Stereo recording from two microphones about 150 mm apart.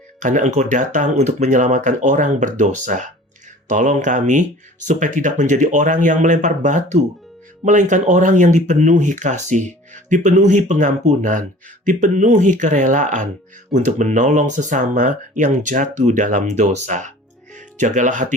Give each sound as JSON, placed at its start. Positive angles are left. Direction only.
{"t": 0.2, "sound": "speech", "side_deg": -55}